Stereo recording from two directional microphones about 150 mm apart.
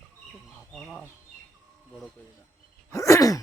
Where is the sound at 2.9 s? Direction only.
20° left (ahead or behind).